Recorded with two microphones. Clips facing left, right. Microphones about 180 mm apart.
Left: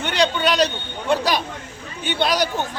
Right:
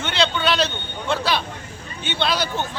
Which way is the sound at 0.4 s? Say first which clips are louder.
Left 3 dB; 40° left (ahead or behind).